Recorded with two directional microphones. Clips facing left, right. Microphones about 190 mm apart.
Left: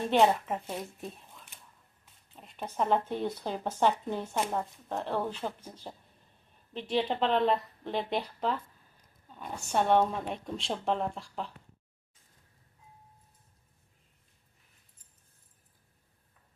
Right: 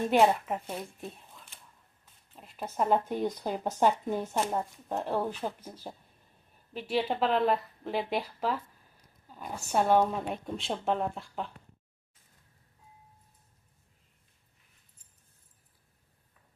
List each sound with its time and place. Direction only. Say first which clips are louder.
0.1 s speech: even; 5° right (ahead or behind)